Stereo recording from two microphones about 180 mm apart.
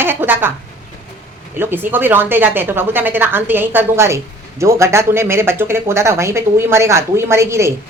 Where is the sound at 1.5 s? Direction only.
10° right (ahead or behind).